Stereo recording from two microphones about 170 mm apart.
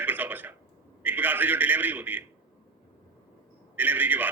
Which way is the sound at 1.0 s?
10° right (ahead or behind).